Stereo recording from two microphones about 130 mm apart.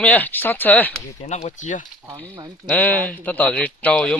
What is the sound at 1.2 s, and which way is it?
Speech, 60° left (ahead or behind).